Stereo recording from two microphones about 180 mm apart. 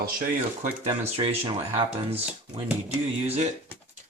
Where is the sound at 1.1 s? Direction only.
30° right (ahead or behind).